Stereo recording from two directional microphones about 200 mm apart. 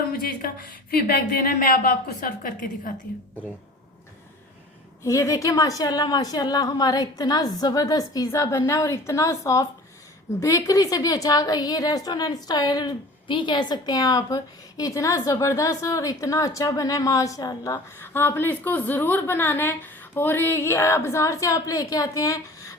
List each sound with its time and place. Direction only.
0.2 s speech: 45° left (ahead or behind)
5.0 s a woman's voice: 15° left (ahead or behind)